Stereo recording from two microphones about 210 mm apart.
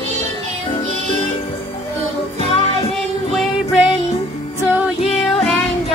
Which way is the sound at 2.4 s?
25° left (ahead or behind).